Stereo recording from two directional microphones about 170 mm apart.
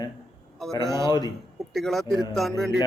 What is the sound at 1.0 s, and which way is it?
Speech, 25° left (ahead or behind).